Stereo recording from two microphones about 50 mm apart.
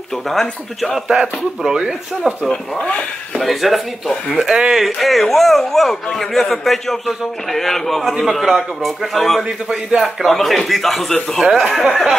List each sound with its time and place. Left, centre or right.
0.1 s speech: centre
0.9 s speech: centre
2.8 s speech: left
3.3 s a man's voice: centre
4.4 s speech: centre
4.8 s a man's voice: centre
11.4 s a man's voice: centre